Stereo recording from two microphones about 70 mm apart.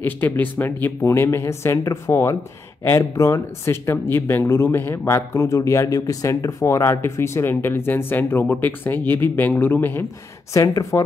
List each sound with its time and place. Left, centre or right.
0.0 s speech: left
10.5 s speech: left